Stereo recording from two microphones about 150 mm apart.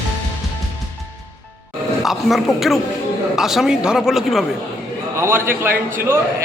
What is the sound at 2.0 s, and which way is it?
A woman's voice, centre (ahead or behind).